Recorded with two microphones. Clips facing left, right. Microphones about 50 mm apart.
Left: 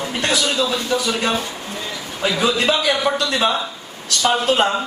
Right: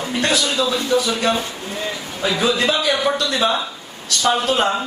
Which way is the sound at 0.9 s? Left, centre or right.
Left.